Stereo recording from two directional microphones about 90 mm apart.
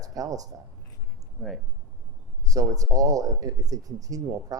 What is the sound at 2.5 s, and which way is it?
Speech, 40° right (ahead or behind).